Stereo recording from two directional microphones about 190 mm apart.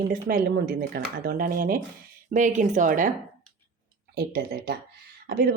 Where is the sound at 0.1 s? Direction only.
50° right (ahead or behind).